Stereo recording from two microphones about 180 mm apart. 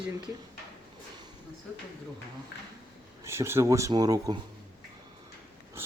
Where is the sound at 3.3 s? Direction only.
15° right (ahead or behind).